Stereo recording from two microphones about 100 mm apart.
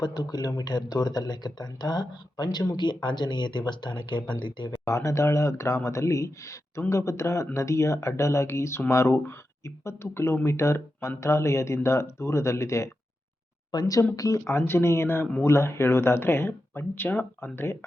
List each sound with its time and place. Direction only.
0.0 s speech: 40° left (ahead or behind)
4.9 s speech: 30° left (ahead or behind)
13.7 s speech: 40° left (ahead or behind); by 17.7 s 25° left (ahead or behind)